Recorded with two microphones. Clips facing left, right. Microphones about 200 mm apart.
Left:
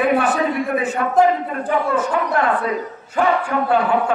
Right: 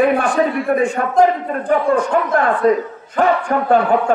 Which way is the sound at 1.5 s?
45° right (ahead or behind).